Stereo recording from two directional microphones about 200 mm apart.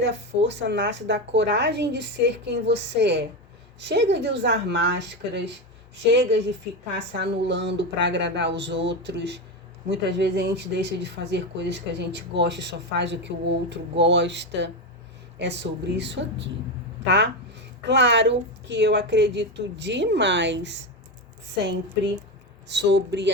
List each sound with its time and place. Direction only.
0.0 s speech: 60° right (ahead or behind)